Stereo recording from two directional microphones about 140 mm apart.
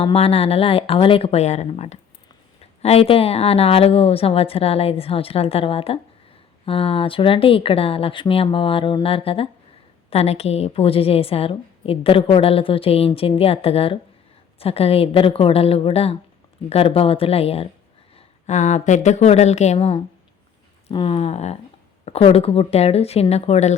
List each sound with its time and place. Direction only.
0.0 s a woman's voice: 45° left (ahead or behind)
18.4 s a woman's voice: 55° left (ahead or behind)
20.9 s a woman's voice: 40° left (ahead or behind)